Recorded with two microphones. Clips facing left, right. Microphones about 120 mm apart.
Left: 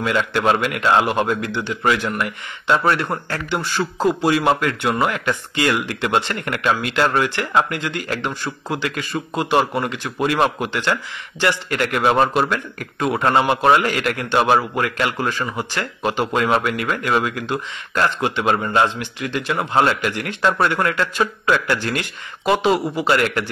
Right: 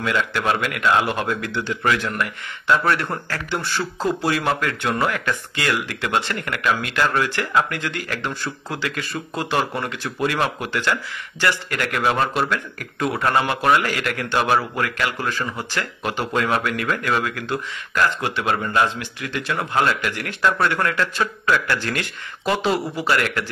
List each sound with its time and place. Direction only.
0.0 s a man's voice: 25° left (ahead or behind)